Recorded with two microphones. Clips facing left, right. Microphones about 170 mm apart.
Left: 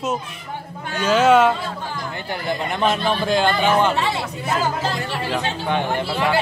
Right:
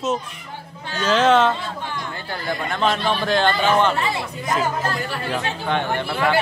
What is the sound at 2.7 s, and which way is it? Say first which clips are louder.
Speech: even; 10° left (ahead or behind).